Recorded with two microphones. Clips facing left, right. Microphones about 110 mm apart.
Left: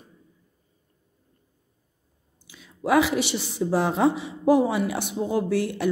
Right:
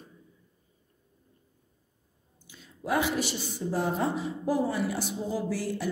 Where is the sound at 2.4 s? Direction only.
90° left.